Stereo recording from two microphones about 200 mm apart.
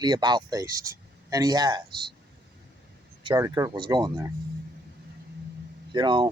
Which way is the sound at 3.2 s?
20° right (ahead or behind).